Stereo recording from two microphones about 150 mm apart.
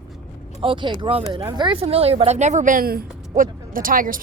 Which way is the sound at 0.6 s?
35° right (ahead or behind).